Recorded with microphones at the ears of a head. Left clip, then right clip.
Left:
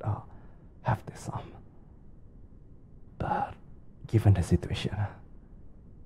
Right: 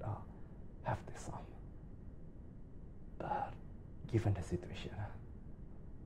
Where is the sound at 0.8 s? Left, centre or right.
Left.